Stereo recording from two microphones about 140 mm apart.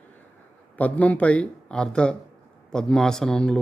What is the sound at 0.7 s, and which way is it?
A man's voice, 10° left (ahead or behind).